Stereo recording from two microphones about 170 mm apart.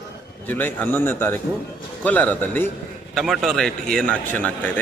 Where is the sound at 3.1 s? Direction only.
Centre (ahead or behind).